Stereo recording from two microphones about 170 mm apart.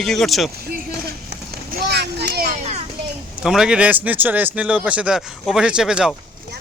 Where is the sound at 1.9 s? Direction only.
75° right (ahead or behind); by 2.6 s 60° right (ahead or behind).